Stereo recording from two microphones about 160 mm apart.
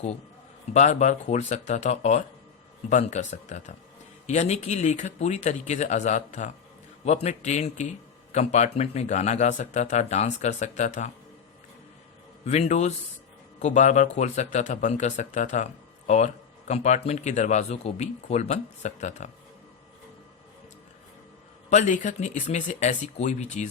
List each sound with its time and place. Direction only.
0.7 s speech: 45° left (ahead or behind)
12.5 s speech: 45° left (ahead or behind)
21.7 s speech: 50° left (ahead or behind)